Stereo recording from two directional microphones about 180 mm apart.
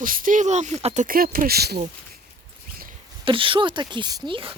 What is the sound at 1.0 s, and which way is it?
Speech, 55° right (ahead or behind).